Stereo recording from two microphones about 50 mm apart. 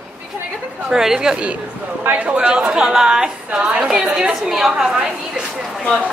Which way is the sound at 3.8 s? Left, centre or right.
Centre.